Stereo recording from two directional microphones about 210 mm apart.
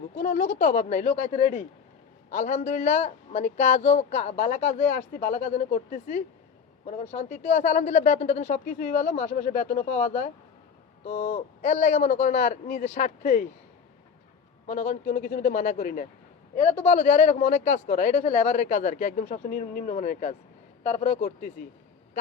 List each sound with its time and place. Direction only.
0.2 s speech: 45° left (ahead or behind)
8.5 s speech: 45° left (ahead or behind)
14.7 s speech: 45° left (ahead or behind)
16.6 s speech: 30° left (ahead or behind)